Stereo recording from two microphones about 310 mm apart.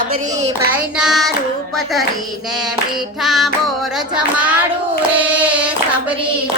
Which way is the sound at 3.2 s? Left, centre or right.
Centre.